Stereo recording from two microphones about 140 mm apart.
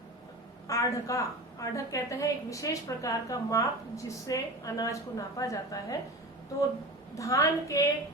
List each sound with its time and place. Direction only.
0.7 s a woman's voice: 25° left (ahead or behind)
7.2 s a woman's voice: 25° left (ahead or behind)